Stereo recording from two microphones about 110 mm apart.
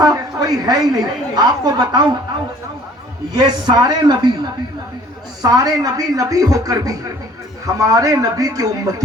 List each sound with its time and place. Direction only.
0.0 s a woman's voice: 35° right (ahead or behind)
3.3 s speech: 40° right (ahead or behind)
5.4 s speech: 35° right (ahead or behind)